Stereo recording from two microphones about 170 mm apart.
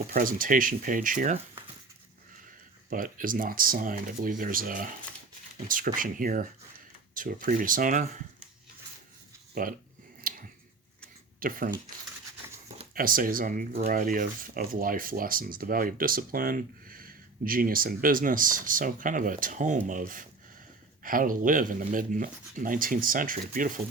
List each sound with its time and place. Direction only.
0.1 s speech: 55° right (ahead or behind)
2.9 s speech: 55° right (ahead or behind)
9.6 s speech: 55° right (ahead or behind)
10.3 s scissors: 60° right (ahead or behind)
11.3 s speech: 55° right (ahead or behind)
12.9 s speech: 55° right (ahead or behind)